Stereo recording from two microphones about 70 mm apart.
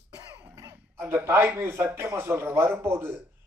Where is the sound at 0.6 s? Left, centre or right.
Right.